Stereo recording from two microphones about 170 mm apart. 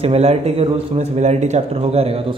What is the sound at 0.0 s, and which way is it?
Speech, 40° right (ahead or behind).